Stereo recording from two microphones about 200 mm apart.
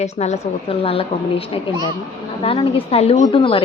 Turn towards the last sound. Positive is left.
turn(degrees=25)  # may be behind; listen again after turning